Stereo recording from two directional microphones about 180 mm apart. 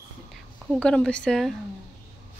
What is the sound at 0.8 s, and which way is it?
Speech, 5° left (ahead or behind).